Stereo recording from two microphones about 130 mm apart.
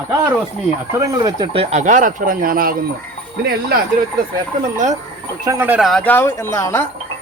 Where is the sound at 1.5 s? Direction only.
65° right (ahead or behind); by 2.7 s 90° right.